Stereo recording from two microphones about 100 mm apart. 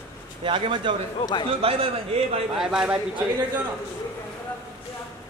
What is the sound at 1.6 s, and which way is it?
Speech, 75° right (ahead or behind).